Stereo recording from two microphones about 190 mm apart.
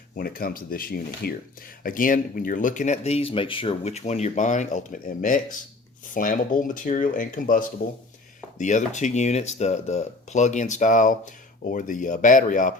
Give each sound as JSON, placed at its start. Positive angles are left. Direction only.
{"t": 0.2, "sound": "speech", "side_deg": 50}